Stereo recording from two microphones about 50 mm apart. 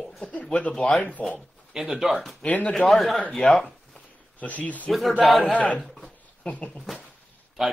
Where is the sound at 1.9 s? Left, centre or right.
Centre.